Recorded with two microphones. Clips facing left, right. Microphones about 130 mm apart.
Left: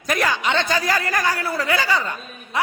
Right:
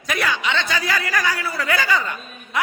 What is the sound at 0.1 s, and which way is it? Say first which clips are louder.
A man's voice: left 2 dB; 45° left (ahead or behind).